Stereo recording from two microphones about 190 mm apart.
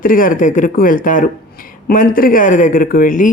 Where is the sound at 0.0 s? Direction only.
45° left (ahead or behind).